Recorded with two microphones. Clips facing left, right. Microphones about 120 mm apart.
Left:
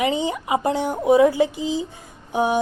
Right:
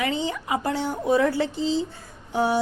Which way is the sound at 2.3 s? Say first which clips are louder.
Left 2 dB; 15° left (ahead or behind).